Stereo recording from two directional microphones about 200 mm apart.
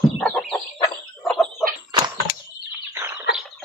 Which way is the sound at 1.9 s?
20° right (ahead or behind).